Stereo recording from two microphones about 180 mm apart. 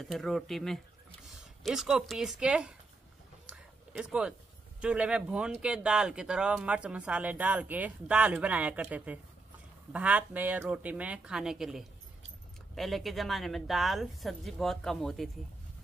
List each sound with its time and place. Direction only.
0.0 s speech: centre (ahead or behind)
3.4 s a sound: 5° right (ahead or behind)
4.7 s speech: 5° right (ahead or behind)